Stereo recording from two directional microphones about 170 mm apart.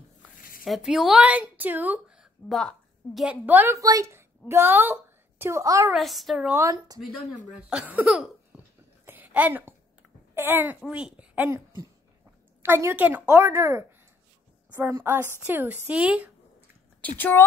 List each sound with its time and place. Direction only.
0.4 s a sound: 55° left (ahead or behind)
0.7 s a woman's voice: centre (ahead or behind)
3.3 s a woman's voice: 10° right (ahead or behind)
5.9 s speech: centre (ahead or behind)
6.6 s speech: 20° right (ahead or behind)
7.5 s speech: 5° right (ahead or behind)
8.5 s a sound: 5° right (ahead or behind)
10.3 s a child's voice: 15° right (ahead or behind)
12.6 s a woman's voice: 15° right (ahead or behind)
17.2 s speech: 10° left (ahead or behind)